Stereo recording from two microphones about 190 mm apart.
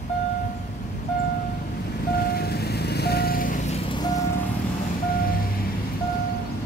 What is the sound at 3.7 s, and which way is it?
Vehicle, 25° left (ahead or behind).